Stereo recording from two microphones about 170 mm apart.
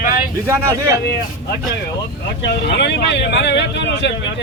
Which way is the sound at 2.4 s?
85° left.